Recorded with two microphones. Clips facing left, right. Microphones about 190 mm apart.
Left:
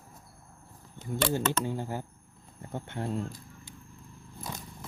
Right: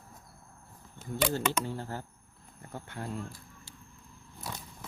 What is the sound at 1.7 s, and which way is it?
Speech, 15° left (ahead or behind).